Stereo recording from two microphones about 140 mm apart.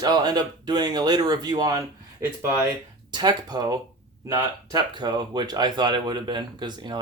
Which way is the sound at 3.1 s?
30° right (ahead or behind).